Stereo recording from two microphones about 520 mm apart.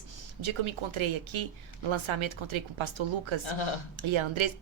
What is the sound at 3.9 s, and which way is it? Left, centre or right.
Speech, right.